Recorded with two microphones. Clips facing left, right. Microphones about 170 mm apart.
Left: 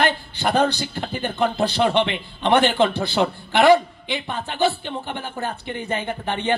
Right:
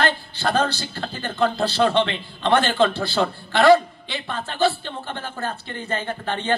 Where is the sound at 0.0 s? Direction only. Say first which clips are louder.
Left 1 dB; 15° left (ahead or behind).